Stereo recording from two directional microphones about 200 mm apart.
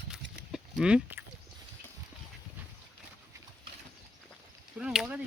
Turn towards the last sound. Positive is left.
turn(degrees=-5)  # may be behind; listen again after turning